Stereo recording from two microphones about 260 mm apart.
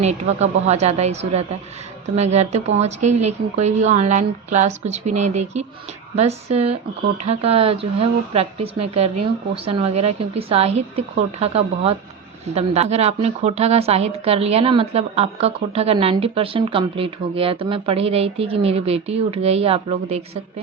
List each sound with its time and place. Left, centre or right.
0.0 s a woman's voice: right